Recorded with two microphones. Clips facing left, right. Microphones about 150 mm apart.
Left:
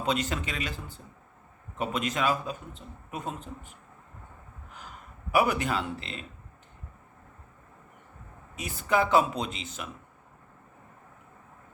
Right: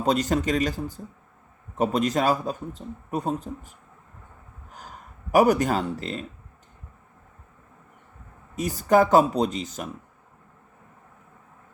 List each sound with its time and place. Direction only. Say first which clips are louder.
0.0 s speech: right 7 dB; 40° right (ahead or behind)
4.7 s a sound: right 3 dB; 40° right (ahead or behind)
8.5 s speech: right 7 dB; 40° right (ahead or behind)